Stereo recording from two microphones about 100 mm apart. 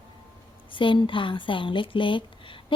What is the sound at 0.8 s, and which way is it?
Speech, 55° left (ahead or behind).